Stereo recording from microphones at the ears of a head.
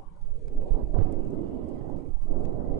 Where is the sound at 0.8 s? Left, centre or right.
Right.